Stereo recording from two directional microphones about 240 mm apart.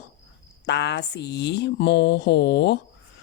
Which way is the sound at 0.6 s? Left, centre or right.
Left.